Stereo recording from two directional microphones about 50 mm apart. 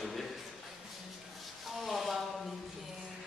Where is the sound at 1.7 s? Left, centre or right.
Centre.